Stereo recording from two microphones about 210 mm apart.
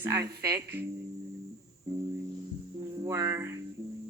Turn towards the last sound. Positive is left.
turn(degrees=-15)  # may be behind; listen again after turning